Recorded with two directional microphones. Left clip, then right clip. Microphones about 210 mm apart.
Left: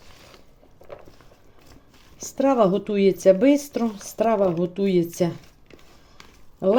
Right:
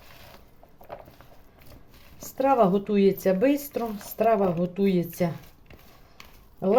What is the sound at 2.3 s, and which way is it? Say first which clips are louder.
A man's voice: left 2 dB; 30° left (ahead or behind).